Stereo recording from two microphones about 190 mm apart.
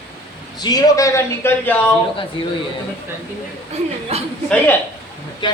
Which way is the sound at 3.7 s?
35° right (ahead or behind).